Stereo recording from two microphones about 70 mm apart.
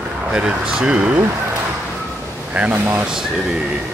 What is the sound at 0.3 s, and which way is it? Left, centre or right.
Speech, centre.